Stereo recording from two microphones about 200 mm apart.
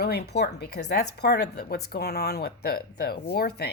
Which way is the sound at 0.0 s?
55° left (ahead or behind).